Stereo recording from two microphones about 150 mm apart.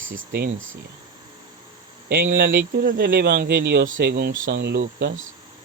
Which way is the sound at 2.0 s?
75° right (ahead or behind).